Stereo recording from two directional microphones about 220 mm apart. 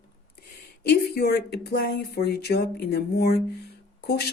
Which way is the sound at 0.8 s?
50° left (ahead or behind).